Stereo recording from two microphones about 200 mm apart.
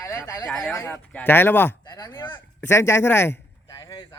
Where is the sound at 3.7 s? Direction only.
25° left (ahead or behind).